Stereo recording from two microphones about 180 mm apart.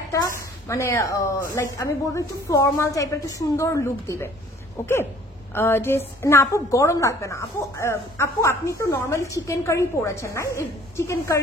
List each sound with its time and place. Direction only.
0.7 s a woman's voice: 15° left (ahead or behind)